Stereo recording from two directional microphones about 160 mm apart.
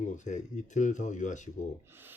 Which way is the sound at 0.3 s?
50° left (ahead or behind).